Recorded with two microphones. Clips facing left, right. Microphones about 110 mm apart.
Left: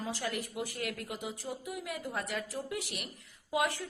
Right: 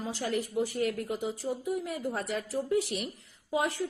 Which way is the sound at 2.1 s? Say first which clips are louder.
Right 3 dB; 30° right (ahead or behind).